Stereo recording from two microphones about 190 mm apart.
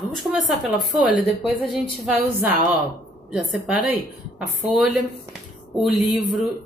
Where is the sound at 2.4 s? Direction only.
10° right (ahead or behind).